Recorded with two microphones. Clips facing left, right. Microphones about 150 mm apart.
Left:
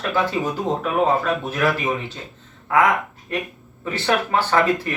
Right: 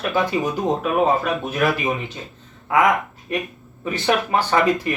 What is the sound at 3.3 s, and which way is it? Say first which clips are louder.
Speech: right 2 dB; 15° right (ahead or behind).